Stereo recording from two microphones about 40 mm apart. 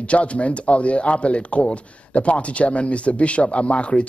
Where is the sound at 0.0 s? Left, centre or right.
Left.